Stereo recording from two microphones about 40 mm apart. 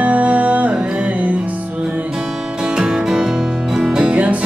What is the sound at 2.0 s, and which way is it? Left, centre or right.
Music, centre.